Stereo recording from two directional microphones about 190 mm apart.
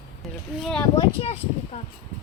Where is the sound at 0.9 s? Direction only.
30° left (ahead or behind).